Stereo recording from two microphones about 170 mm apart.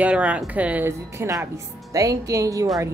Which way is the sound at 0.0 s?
10° right (ahead or behind).